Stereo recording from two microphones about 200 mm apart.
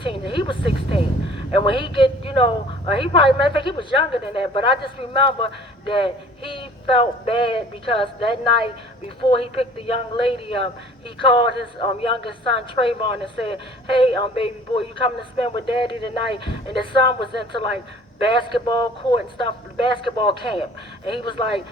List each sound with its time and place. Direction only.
0.0 s speech: 25° left (ahead or behind)